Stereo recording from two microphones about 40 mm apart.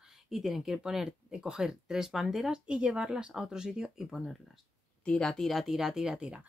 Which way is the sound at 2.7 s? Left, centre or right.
Right.